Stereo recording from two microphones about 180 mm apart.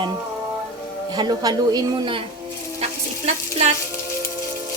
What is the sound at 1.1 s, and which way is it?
A woman's voice, 25° right (ahead or behind).